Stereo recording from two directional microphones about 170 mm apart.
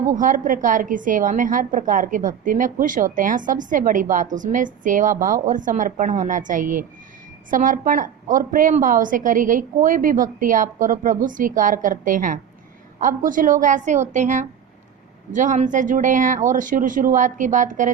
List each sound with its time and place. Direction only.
0.1 s a woman's voice: 50° right (ahead or behind)